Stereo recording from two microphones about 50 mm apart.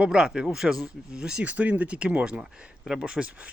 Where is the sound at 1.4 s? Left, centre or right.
Right.